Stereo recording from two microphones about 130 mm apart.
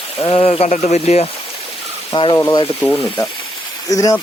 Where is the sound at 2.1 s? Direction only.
40° left (ahead or behind).